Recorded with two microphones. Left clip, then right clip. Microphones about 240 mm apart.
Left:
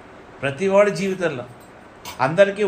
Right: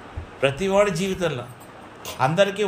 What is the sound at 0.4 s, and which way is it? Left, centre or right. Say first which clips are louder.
A man's voice: left 2 dB; right.